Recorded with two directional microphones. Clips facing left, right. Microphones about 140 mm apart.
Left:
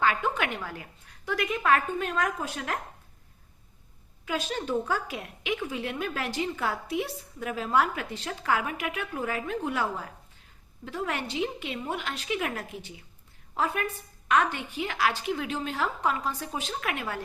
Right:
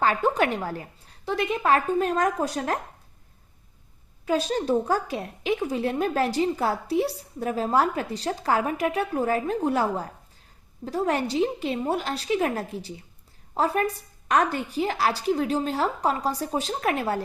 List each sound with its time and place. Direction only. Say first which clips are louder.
0.0 s a woman's voice: right 5 dB; 35° right (ahead or behind)
4.3 s a woman's voice: right 7 dB; 35° right (ahead or behind)